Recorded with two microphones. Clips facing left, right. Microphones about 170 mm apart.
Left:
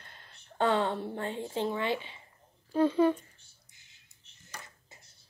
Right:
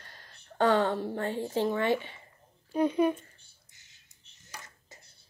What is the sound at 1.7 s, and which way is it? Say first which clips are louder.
Speech: right 4 dB; 50° right (ahead or behind).